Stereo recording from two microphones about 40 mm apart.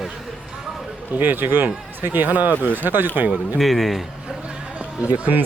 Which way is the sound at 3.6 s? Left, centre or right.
Centre.